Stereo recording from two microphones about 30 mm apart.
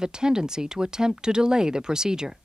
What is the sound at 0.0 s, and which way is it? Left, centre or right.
A woman's voice, right.